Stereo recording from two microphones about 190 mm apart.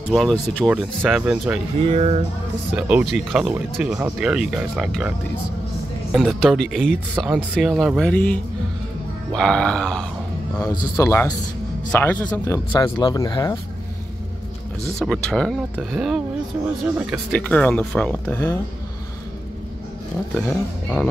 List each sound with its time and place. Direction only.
0.1 s speech: 5° left (ahead or behind)
1.9 s speech: 35° right (ahead or behind)
2.7 s speech: 5° right (ahead or behind)
6.1 s speech: centre (ahead or behind)
10.7 s speech: 20° left (ahead or behind)
15.0 s speech: 5° left (ahead or behind)
20.3 s speech: 5° left (ahead or behind)